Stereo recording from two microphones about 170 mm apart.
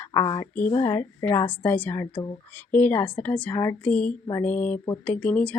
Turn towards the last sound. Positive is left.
turn(degrees=10)  # may be behind; listen again after turning